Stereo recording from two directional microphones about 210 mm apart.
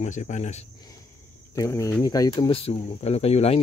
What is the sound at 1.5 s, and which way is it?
Speech, 15° left (ahead or behind).